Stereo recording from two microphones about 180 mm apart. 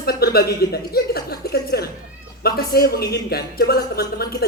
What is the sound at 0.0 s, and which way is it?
A man's voice, 60° left (ahead or behind).